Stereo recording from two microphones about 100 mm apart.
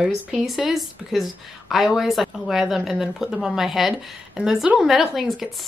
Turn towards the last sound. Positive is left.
turn(degrees=0)  # may be behind; listen again after turning